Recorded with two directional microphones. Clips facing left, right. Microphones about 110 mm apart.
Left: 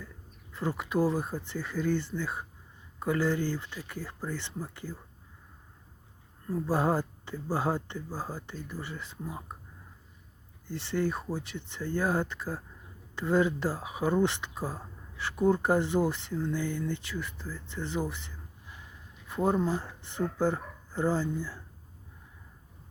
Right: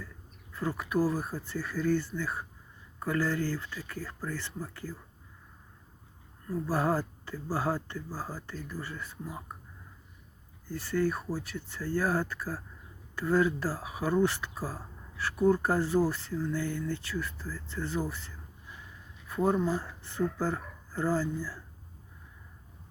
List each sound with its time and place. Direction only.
0.5 s speech: 25° left (ahead or behind)
6.5 s speech: 20° left (ahead or behind)
10.7 s speech: 25° left (ahead or behind)
19.5 s speech: 20° left (ahead or behind)